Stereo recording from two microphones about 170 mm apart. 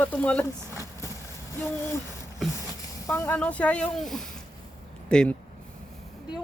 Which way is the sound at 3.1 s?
15° left (ahead or behind).